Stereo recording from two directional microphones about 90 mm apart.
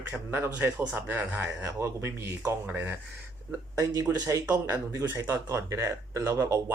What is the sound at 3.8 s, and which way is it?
Speech, 45° right (ahead or behind).